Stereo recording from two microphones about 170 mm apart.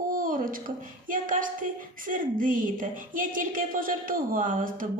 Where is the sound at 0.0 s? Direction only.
55° right (ahead or behind).